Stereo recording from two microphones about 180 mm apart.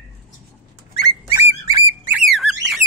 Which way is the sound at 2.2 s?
Centre (ahead or behind).